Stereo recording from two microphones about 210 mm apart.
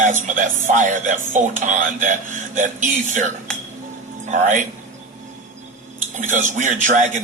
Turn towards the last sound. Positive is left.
turn(degrees=-35)  # may be behind; listen again after turning